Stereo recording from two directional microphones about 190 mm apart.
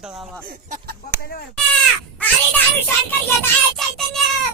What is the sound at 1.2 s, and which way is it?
Speech, 50° left (ahead or behind).